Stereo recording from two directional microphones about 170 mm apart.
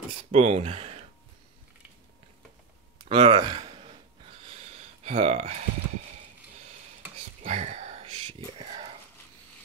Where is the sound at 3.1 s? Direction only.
30° right (ahead or behind).